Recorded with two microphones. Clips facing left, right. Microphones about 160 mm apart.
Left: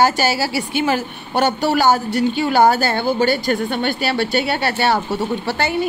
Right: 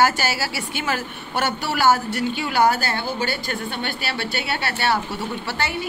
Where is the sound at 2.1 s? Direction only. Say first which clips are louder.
Left 6 dB; 35° left (ahead or behind).